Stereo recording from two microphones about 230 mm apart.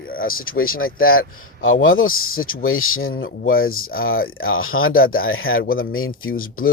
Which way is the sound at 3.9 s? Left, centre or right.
Left.